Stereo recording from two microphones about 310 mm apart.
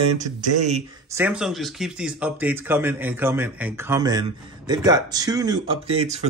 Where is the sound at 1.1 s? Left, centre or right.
Centre.